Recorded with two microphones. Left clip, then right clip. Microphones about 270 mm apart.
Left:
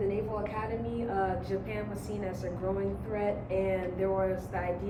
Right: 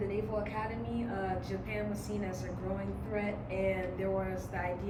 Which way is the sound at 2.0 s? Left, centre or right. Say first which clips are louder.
Left 3 dB; centre.